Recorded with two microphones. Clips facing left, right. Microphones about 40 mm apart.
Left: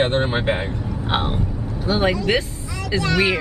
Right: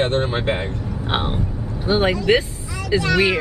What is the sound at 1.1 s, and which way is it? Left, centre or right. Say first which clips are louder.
Speech: even; centre.